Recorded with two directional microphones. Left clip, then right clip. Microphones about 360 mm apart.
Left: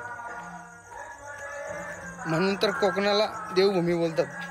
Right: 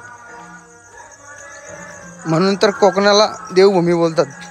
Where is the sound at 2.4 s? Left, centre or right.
Centre.